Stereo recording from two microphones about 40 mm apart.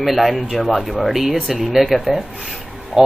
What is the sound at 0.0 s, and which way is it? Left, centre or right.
Speech, centre.